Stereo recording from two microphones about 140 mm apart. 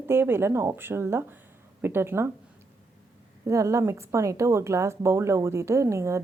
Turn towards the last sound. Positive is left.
turn(degrees=-20)  # may be behind; listen again after turning